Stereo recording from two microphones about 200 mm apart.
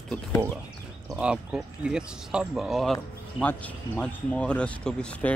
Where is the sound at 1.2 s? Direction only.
5° right (ahead or behind).